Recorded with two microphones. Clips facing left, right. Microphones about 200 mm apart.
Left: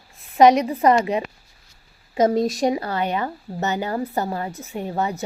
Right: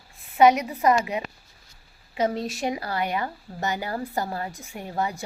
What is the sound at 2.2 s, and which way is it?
Speech, 45° left (ahead or behind).